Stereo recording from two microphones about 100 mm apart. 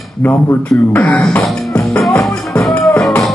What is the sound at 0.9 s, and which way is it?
Beatboxing, 10° left (ahead or behind).